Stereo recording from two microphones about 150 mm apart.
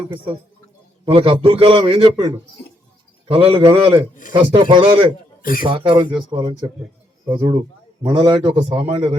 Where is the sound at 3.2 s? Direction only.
40° right (ahead or behind).